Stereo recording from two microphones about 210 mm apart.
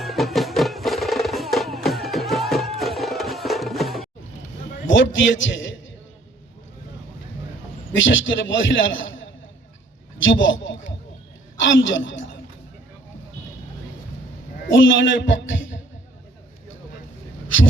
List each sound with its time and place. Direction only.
0.0 s music: centre (ahead or behind)
4.9 s a man's voice: 60° left (ahead or behind)
7.9 s a man's voice: 65° left (ahead or behind)
10.2 s a sound: 65° left (ahead or behind)
11.6 s a woman's voice: 65° left (ahead or behind)
14.7 s a man's voice: 60° left (ahead or behind)